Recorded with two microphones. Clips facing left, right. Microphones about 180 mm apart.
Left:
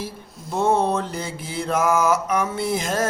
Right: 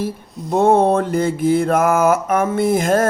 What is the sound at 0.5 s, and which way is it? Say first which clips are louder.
Music: right 7 dB; 55° right (ahead or behind).